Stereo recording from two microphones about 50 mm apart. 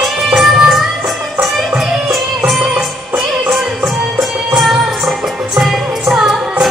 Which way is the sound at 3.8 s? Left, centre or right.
Centre.